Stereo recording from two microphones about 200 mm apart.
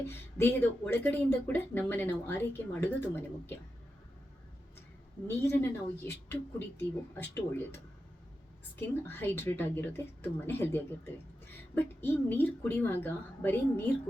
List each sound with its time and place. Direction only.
0.0 s speech: 10° left (ahead or behind)
5.4 s speech: 10° left (ahead or behind)
9.0 s speech: 10° left (ahead or behind)